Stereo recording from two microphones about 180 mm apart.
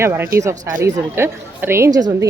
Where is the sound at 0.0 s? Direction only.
15° right (ahead or behind).